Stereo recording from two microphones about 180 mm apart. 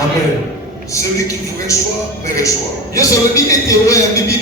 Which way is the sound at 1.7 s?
15° left (ahead or behind).